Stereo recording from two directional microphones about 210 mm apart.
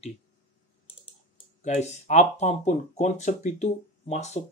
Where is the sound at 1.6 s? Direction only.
35° left (ahead or behind).